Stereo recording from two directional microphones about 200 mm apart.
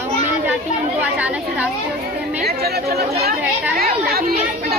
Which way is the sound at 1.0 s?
5° right (ahead or behind).